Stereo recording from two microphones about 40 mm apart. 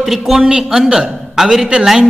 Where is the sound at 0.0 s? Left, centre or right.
Centre.